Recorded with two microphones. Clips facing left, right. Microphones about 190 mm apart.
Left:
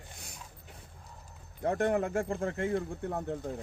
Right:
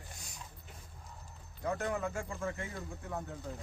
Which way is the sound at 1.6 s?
55° left (ahead or behind).